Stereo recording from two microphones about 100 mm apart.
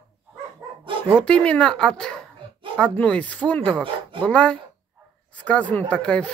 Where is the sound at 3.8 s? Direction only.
55° right (ahead or behind).